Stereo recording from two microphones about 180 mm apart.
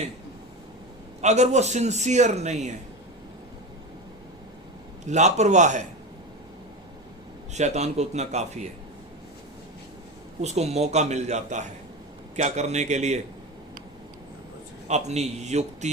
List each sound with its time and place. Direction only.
1.2 s a man's voice: 40° right (ahead or behind)
5.0 s a man's voice: 40° right (ahead or behind)
7.5 s a man's voice: 40° right (ahead or behind)
10.4 s a man's voice: 35° right (ahead or behind)
14.8 s a man's voice: 40° right (ahead or behind)